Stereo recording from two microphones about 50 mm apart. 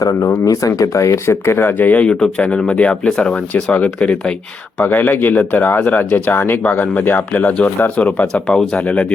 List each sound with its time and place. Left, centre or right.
0.3 s speech: left
1.8 s speech: left
2.6 s speech: left
6.7 s speech: left
8.4 s speech: centre